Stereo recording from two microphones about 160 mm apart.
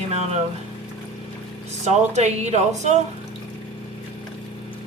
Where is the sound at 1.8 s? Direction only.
45° right (ahead or behind).